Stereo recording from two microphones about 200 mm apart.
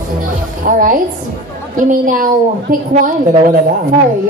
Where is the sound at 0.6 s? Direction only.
40° right (ahead or behind).